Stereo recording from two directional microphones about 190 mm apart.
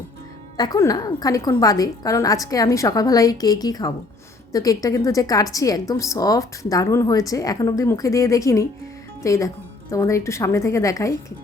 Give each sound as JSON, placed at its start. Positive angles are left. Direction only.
{"t": 0.5, "sound": "a woman's voice", "side_deg": 20}